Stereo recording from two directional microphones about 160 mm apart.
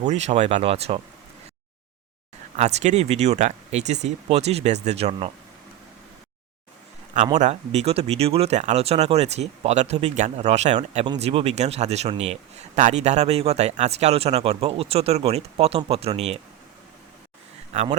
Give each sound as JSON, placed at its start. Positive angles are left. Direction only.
{"t": 0.1, "sound": "speech", "side_deg": -45}
{"t": 2.6, "sound": "speech", "side_deg": -45}
{"t": 7.3, "sound": "a man's voice", "side_deg": -45}